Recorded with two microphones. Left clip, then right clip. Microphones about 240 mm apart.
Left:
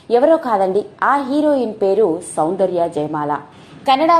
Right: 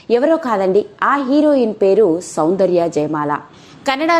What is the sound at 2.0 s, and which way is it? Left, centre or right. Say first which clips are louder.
Speech: right 2 dB; right.